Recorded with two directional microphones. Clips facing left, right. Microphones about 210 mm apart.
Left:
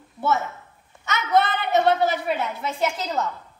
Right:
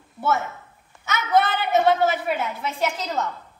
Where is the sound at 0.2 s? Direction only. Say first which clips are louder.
Even; centre (ahead or behind).